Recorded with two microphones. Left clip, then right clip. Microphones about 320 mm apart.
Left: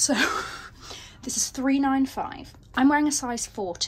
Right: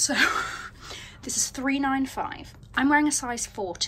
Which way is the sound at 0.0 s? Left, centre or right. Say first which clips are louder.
Right 1 dB; centre.